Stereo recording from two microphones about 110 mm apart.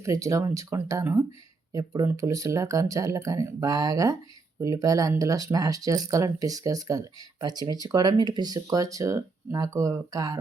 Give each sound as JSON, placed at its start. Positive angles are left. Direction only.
{"t": 0.0, "sound": "speech", "side_deg": -30}